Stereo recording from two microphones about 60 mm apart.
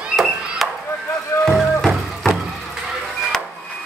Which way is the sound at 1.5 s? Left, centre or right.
Centre.